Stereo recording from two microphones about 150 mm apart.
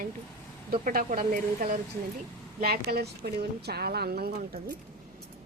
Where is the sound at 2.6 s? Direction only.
90° right.